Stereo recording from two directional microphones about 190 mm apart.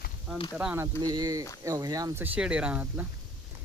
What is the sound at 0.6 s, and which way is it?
Speech, 5° right (ahead or behind).